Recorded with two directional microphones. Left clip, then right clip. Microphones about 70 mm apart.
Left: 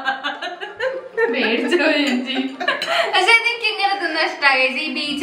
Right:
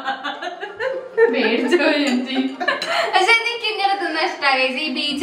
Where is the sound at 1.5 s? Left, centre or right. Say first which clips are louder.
Even; centre.